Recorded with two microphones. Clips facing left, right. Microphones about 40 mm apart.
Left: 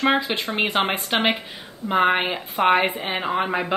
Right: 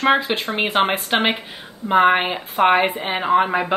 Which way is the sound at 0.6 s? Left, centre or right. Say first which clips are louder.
Right 3 dB; centre.